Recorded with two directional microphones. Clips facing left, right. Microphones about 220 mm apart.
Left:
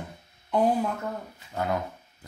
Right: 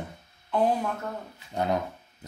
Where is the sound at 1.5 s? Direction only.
20° right (ahead or behind).